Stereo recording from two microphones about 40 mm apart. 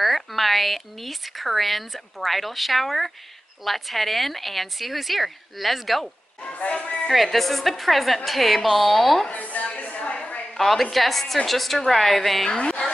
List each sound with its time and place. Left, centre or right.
0.0 s a woman's voice: centre
6.4 s a sound: left
6.7 s speech: left
7.1 s a woman's voice: centre
9.3 s a sound: left
10.6 s a woman's voice: centre
12.4 s a woman's voice: left